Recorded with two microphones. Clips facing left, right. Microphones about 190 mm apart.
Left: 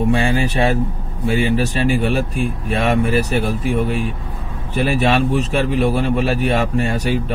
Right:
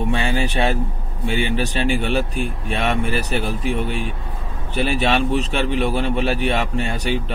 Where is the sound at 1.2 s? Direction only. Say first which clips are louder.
Left 4 dB; 40° left (ahead or behind).